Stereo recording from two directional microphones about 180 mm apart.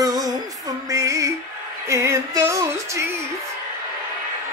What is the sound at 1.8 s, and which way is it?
Music, 15° right (ahead or behind).